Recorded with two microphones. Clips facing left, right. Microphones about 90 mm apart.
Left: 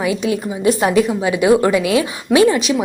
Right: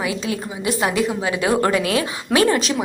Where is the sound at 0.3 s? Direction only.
25° left (ahead or behind).